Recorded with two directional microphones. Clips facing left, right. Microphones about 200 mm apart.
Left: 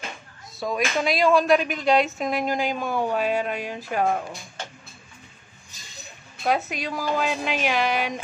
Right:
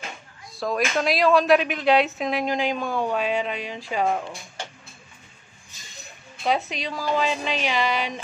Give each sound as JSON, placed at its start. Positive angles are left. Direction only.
{"t": 0.6, "sound": "a woman's voice", "side_deg": 0}
{"t": 6.4, "sound": "a woman's voice", "side_deg": 5}
{"t": 7.8, "sound": "speech", "side_deg": 50}